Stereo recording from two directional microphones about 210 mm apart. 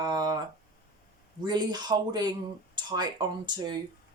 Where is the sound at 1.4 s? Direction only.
20° right (ahead or behind).